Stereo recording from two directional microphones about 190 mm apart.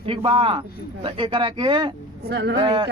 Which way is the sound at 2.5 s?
25° right (ahead or behind).